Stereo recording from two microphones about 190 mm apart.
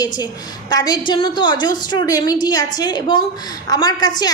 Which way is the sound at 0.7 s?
20° left (ahead or behind).